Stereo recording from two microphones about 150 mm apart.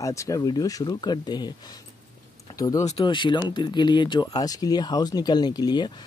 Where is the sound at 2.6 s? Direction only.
25° left (ahead or behind).